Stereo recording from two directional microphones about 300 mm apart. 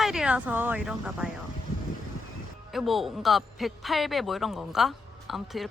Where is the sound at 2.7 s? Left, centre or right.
Centre.